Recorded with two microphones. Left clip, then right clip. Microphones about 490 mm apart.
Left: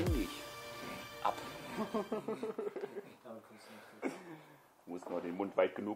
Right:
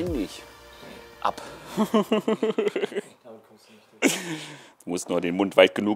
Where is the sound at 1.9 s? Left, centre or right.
Right.